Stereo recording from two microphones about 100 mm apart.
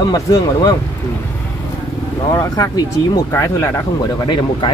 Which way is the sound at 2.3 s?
35° left (ahead or behind).